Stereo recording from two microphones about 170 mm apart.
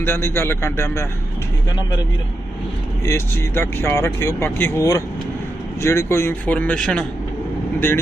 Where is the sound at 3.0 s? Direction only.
15° left (ahead or behind).